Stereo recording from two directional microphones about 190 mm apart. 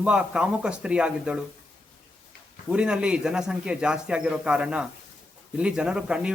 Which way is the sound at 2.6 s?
5° right (ahead or behind).